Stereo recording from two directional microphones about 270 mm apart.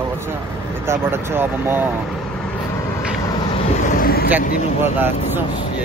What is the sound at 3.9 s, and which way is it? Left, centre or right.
Vehicle, left.